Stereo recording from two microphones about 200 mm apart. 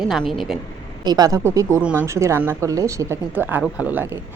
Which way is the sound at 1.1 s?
20° right (ahead or behind).